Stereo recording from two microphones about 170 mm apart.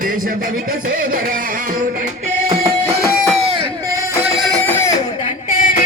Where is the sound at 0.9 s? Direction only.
55° right (ahead or behind).